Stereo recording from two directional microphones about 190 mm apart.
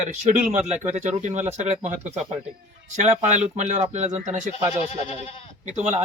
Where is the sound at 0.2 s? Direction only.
40° right (ahead or behind).